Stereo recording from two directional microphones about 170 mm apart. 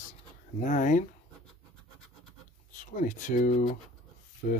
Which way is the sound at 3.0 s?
50° left (ahead or behind).